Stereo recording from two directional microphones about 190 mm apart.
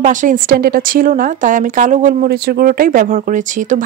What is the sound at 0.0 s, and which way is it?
Speech, 40° right (ahead or behind).